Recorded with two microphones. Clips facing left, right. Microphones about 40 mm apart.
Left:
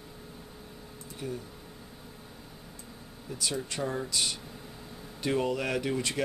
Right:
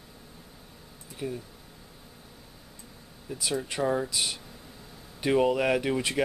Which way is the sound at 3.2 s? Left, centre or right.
Centre.